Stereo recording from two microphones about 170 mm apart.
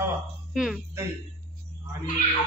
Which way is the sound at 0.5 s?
Centre (ahead or behind).